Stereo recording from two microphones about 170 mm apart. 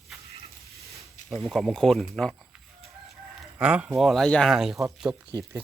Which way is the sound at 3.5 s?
5° right (ahead or behind).